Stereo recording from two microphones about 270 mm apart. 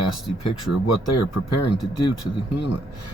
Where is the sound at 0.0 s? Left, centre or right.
Left.